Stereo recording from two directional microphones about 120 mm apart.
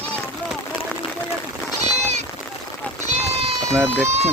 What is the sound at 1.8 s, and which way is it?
Sheep, 70° right (ahead or behind).